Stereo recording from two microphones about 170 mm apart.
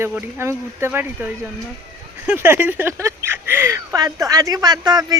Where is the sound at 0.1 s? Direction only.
10° right (ahead or behind).